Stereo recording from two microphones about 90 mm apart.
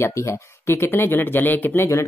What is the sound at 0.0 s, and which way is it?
Speech, 30° left (ahead or behind).